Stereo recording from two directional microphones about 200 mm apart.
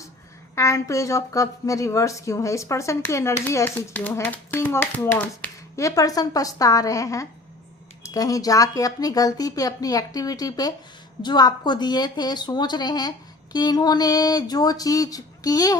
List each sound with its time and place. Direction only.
0.5 s a woman's voice: 15° left (ahead or behind)